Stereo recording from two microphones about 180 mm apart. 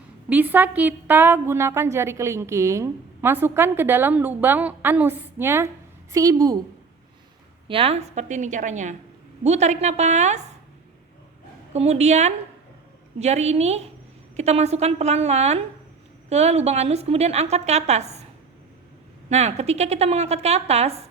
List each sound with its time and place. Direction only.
0.3 s a woman's voice: 10° right (ahead or behind)
7.7 s a woman's voice: 30° right (ahead or behind)
11.7 s a woman's voice: 35° right (ahead or behind)
19.3 s a woman's voice: 40° right (ahead or behind)